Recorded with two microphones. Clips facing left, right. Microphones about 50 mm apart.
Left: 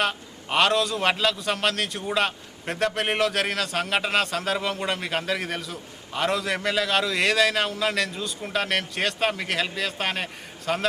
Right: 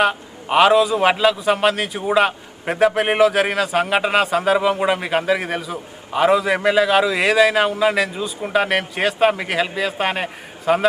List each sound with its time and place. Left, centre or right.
0.0 s a man's voice: centre